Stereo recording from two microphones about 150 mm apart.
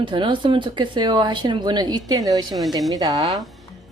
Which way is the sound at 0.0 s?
35° right (ahead or behind).